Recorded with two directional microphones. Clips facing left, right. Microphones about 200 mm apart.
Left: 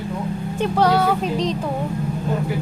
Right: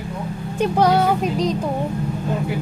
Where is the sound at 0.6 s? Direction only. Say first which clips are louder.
Right 1 dB; 15° right (ahead or behind).